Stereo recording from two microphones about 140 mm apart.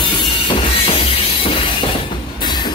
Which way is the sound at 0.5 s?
40° left (ahead or behind).